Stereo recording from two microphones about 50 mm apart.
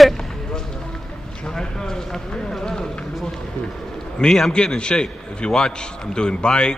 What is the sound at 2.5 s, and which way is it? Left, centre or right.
Run, centre.